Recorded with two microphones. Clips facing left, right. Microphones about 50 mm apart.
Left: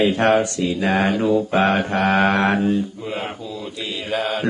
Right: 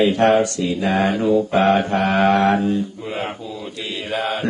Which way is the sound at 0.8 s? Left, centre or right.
Centre.